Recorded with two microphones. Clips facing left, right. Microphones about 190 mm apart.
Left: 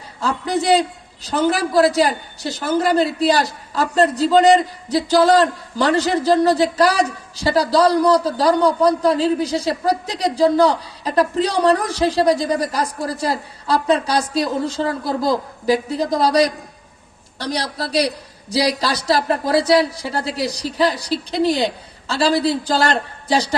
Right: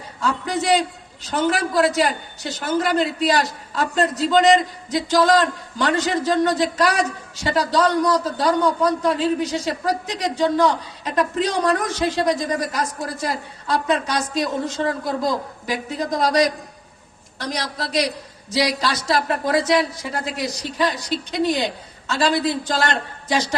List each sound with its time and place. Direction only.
0.2 s a man's voice: 35° left (ahead or behind)